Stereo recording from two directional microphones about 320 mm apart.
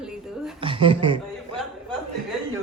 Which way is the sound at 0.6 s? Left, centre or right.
Centre.